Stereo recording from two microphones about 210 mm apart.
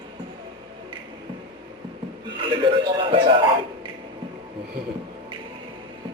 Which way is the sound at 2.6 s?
25° right (ahead or behind).